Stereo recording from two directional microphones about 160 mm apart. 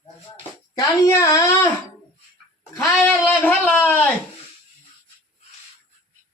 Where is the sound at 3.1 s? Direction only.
10° left (ahead or behind).